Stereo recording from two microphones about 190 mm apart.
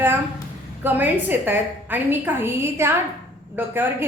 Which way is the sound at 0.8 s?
10° right (ahead or behind).